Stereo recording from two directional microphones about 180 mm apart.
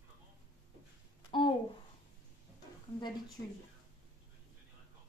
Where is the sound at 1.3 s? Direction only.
30° left (ahead or behind).